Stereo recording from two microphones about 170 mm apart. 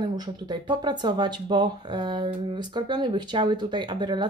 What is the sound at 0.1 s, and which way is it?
Speech, 25° right (ahead or behind).